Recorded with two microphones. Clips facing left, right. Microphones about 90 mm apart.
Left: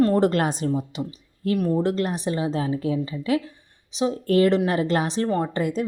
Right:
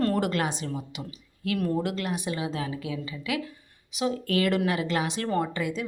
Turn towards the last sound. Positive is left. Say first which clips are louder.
# left 4 dB
turn(degrees=40)  # may be behind; listen again after turning